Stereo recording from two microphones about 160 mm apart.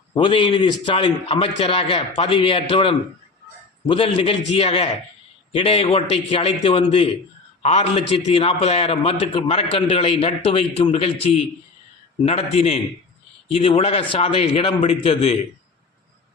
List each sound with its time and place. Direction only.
0.1 s a man's voice: 30° left (ahead or behind)